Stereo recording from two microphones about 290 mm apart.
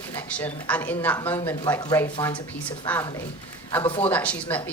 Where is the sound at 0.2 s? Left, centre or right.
Centre.